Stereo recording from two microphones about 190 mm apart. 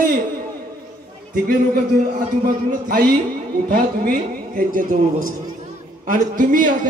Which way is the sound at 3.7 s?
50° right (ahead or behind).